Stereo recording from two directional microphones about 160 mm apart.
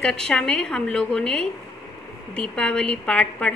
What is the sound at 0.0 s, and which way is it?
A woman's voice, 5° left (ahead or behind).